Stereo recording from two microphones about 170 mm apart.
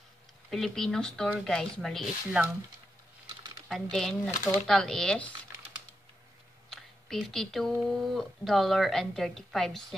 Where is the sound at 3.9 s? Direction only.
5° left (ahead or behind).